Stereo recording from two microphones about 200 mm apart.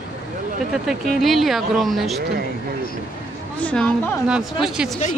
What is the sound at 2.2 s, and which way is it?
Speech, 55° right (ahead or behind).